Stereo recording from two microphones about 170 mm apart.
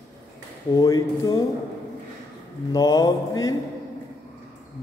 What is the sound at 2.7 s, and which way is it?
Mantra, 25° left (ahead or behind).